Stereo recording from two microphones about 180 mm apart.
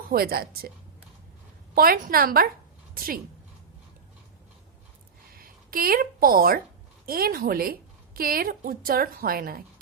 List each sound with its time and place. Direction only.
0.1 s a woman's voice: 55° right (ahead or behind)
1.7 s a woman's voice: 55° right (ahead or behind)
5.3 s a woman's voice: 55° right (ahead or behind)